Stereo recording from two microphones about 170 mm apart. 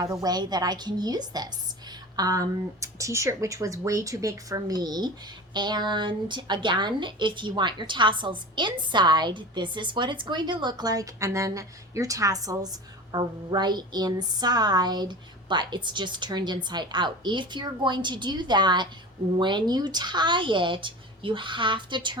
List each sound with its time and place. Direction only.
0.0 s a woman's voice: 20° right (ahead or behind)